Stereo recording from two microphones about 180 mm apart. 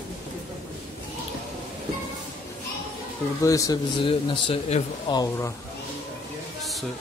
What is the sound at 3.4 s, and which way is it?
Speech, 20° left (ahead or behind).